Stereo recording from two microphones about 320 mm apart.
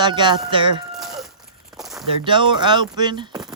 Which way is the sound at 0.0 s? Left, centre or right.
Centre.